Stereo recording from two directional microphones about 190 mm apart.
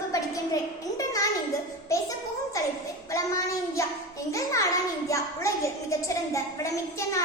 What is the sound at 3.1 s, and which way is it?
Child singing, 15° left (ahead or behind).